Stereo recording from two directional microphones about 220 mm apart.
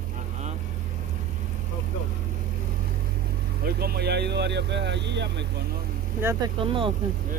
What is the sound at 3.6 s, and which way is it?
Speech, 45° right (ahead or behind).